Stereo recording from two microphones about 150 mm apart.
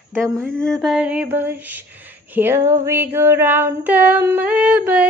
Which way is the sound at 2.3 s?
15° right (ahead or behind).